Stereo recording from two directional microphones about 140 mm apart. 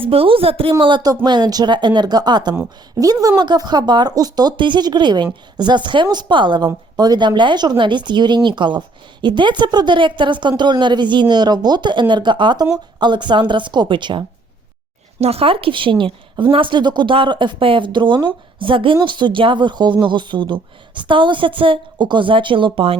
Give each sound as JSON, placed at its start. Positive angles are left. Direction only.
{"t": 0.0, "sound": "speech", "side_deg": -40}
{"t": 15.2, "sound": "speech", "side_deg": -45}